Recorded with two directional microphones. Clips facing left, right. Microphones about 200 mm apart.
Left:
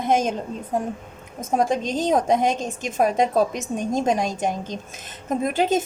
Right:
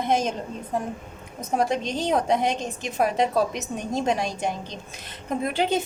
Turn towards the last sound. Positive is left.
turn(degrees=45)  # may be behind; listen again after turning